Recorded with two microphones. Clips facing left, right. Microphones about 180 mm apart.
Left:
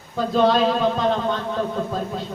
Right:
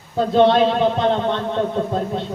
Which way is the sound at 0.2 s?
25° right (ahead or behind).